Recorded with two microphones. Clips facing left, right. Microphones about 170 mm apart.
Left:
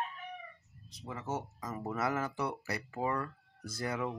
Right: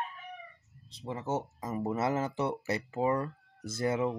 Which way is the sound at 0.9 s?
30° right (ahead or behind).